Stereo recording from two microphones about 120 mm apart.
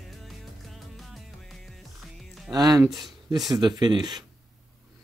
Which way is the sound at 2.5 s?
35° right (ahead or behind).